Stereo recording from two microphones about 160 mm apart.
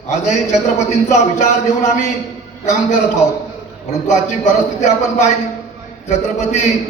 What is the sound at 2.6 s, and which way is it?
Speech, 50° left (ahead or behind).